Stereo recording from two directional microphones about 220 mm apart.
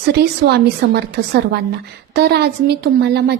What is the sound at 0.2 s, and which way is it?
A woman's voice, 50° right (ahead or behind).